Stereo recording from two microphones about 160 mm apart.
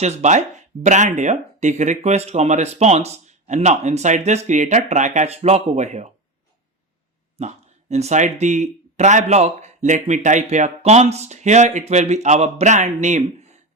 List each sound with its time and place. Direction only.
0.0 s speech: 45° right (ahead or behind)
7.3 s speech: 45° right (ahead or behind)